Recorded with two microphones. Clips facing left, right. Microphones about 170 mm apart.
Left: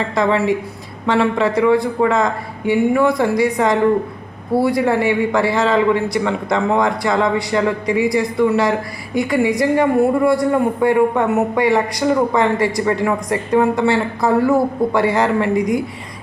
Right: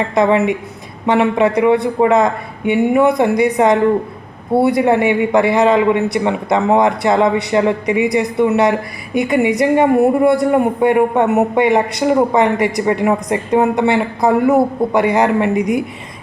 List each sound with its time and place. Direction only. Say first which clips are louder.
0.1 s a woman's voice: right 3 dB; 20° right (ahead or behind)